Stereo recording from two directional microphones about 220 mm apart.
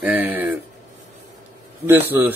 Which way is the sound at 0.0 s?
10° right (ahead or behind).